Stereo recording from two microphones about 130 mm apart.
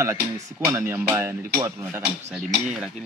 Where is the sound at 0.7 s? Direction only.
20° right (ahead or behind).